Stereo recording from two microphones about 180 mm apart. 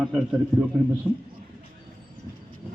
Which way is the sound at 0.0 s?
Centre (ahead or behind).